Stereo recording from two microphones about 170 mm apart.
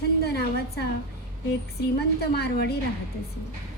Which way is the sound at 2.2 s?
70° left (ahead or behind).